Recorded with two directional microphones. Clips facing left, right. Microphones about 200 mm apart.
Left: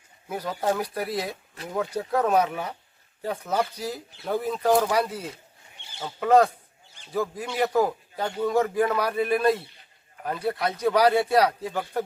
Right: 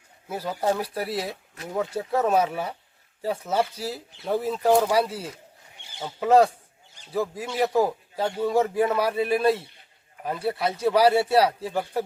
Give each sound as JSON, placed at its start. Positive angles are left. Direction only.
{"t": 0.3, "sound": "a man's voice", "side_deg": -5}
{"t": 9.3, "sound": "a man's voice", "side_deg": -30}
{"t": 10.2, "sound": "speech", "side_deg": -5}